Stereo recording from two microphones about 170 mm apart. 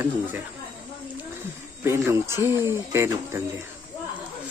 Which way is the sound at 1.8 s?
15° right (ahead or behind).